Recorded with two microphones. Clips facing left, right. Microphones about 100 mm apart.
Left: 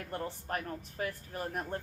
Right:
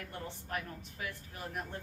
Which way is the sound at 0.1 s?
40° left (ahead or behind).